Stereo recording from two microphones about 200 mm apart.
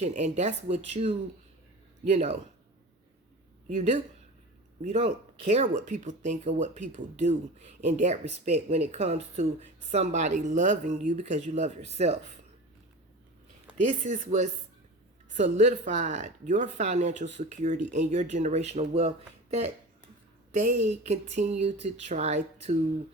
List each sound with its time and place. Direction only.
0.0 s speech: 35° right (ahead or behind)
3.8 s speech: 35° right (ahead or behind)
13.7 s speech: 35° right (ahead or behind)